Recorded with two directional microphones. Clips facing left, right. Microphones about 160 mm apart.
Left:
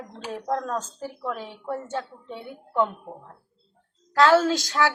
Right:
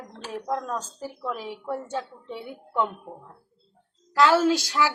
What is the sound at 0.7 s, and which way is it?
A woman's voice, 5° right (ahead or behind).